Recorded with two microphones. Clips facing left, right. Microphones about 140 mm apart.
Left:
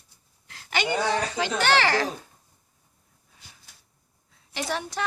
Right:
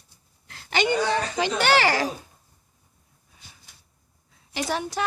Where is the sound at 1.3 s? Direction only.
15° right (ahead or behind).